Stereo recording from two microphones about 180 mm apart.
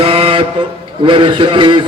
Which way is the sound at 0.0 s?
30° right (ahead or behind).